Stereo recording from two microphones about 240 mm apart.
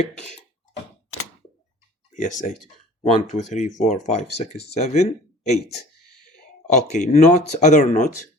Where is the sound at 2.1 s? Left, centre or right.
Left.